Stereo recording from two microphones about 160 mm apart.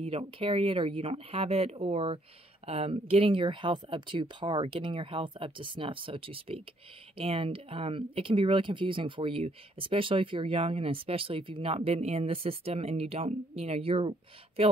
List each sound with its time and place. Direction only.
0.0 s speech: 35° right (ahead or behind)